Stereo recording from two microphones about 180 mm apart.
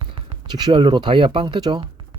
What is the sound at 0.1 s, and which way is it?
Speech, 25° right (ahead or behind).